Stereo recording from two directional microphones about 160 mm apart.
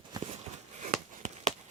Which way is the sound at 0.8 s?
50° right (ahead or behind).